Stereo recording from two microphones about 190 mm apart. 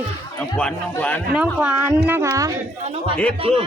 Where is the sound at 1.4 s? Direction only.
5° right (ahead or behind).